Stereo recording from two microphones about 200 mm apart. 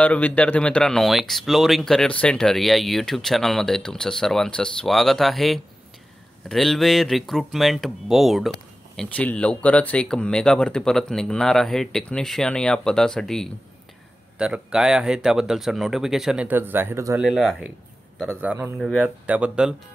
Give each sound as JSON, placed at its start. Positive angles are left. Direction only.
{"t": 0.0, "sound": "speech", "side_deg": 5}
{"t": 17.2, "sound": "a man's voice", "side_deg": 0}